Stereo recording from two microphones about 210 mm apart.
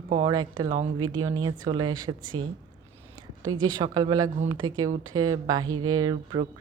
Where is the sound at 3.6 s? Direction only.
20° right (ahead or behind).